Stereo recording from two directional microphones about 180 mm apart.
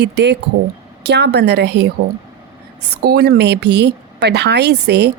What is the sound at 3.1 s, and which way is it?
A woman's voice, 60° right (ahead or behind).